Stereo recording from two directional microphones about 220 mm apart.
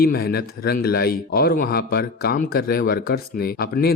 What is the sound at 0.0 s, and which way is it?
Speech, 45° left (ahead or behind).